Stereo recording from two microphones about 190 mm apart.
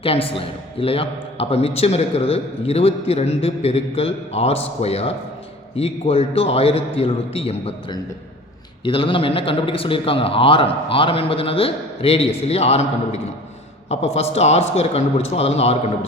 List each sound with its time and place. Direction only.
0.0 s a man's voice: 30° left (ahead or behind)